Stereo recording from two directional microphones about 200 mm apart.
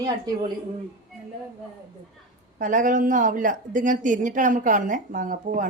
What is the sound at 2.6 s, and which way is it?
A woman's voice, 40° right (ahead or behind).